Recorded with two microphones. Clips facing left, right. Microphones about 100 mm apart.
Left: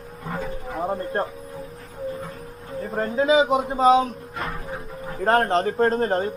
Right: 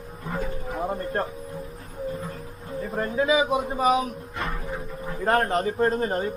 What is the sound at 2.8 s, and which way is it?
Speech, 35° left (ahead or behind).